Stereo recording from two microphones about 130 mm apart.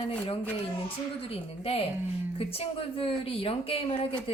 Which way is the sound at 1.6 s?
50° left (ahead or behind).